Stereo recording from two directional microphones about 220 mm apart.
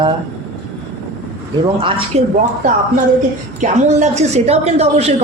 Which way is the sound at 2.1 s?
30° right (ahead or behind).